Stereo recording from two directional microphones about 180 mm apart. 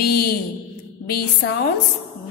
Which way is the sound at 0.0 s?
60° left (ahead or behind).